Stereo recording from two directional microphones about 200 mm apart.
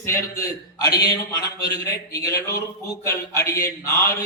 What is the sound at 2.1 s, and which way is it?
A man's voice, 15° left (ahead or behind).